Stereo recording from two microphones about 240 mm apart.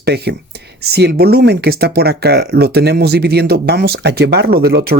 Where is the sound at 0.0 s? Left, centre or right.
Right.